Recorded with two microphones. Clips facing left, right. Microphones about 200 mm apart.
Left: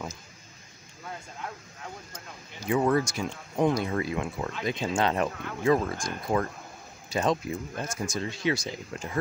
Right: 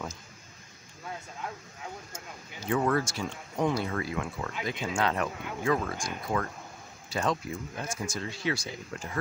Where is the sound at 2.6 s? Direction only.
15° left (ahead or behind).